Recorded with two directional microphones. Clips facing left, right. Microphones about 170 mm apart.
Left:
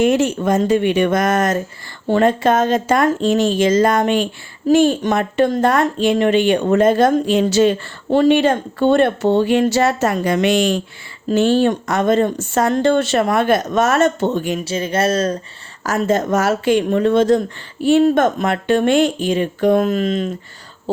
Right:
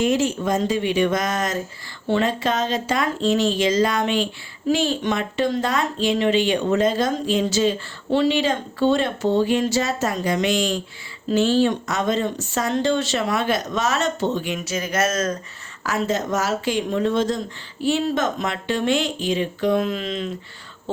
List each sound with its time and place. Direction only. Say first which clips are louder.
0.0 s a woman's voice: left 5 dB; 65° left (ahead or behind)
14.6 s speech: left 4 dB; 30° left (ahead or behind)
15.8 s a woman's voice: left 6 dB; 45° left (ahead or behind)